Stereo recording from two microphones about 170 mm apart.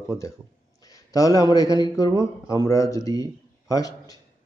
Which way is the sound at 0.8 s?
20° left (ahead or behind).